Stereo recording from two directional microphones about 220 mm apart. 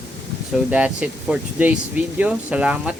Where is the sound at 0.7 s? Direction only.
5° right (ahead or behind).